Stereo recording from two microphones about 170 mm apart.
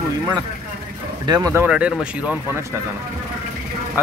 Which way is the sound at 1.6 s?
5° right (ahead or behind).